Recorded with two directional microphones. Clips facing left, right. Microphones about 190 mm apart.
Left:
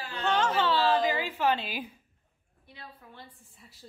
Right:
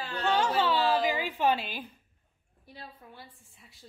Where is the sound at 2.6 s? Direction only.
35° right (ahead or behind).